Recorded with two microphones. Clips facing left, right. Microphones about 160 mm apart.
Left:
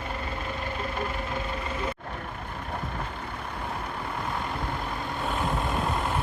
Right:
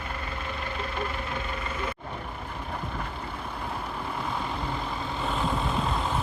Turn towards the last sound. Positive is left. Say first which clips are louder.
# even
turn(degrees=10)  # may be behind; listen again after turning